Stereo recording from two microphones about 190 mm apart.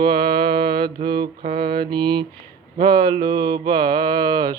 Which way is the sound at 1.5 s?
25° right (ahead or behind).